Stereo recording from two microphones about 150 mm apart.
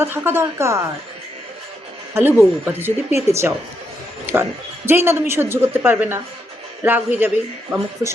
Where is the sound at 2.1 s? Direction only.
15° right (ahead or behind).